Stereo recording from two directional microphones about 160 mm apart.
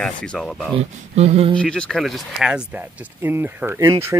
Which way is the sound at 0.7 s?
40° right (ahead or behind).